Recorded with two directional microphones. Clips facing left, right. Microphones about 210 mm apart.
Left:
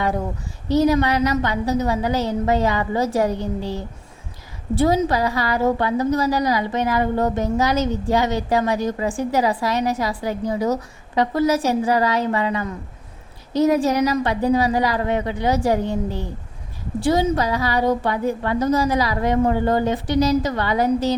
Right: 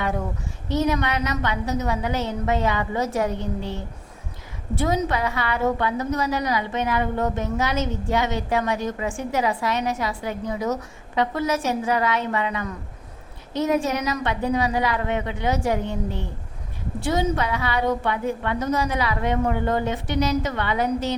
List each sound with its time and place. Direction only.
0.7 s a woman's voice: 35° left (ahead or behind)